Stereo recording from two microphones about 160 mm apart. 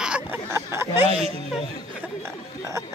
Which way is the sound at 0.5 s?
15° right (ahead or behind).